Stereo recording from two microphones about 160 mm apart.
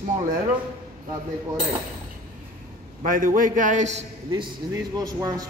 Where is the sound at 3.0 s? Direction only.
55° right (ahead or behind).